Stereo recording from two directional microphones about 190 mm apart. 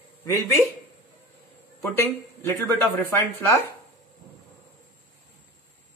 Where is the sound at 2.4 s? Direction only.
10° left (ahead or behind).